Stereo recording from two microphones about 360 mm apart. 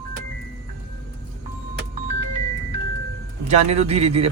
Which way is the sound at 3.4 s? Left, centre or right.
Centre.